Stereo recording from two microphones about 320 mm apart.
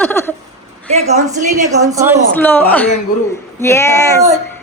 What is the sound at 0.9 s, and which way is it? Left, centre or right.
Speech, right.